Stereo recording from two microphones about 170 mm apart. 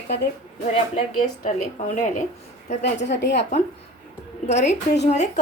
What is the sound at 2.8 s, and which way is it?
Speech, 90° left.